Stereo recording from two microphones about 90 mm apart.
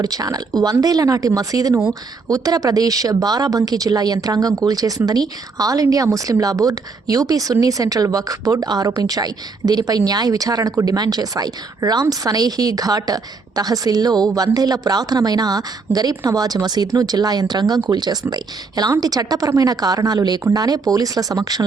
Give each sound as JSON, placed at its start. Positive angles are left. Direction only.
{"t": 0.0, "sound": "speech", "side_deg": -45}